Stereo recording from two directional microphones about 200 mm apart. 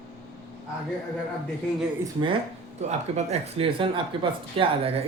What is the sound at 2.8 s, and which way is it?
Speech, 35° right (ahead or behind).